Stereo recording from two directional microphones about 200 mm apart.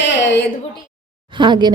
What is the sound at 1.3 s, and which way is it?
Speech, 20° right (ahead or behind).